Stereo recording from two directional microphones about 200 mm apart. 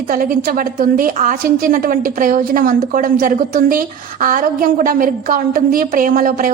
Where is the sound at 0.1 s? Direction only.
45° right (ahead or behind).